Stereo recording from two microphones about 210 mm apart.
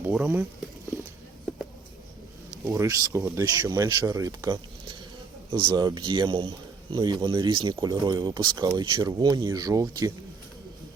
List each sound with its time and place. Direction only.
0.0 s speech: 5° right (ahead or behind)
2.6 s speech: 15° right (ahead or behind)